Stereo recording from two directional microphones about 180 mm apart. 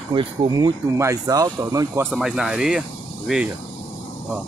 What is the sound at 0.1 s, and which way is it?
Speech, 30° right (ahead or behind).